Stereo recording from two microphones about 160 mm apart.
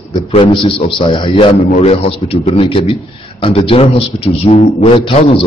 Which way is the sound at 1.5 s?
45° left (ahead or behind).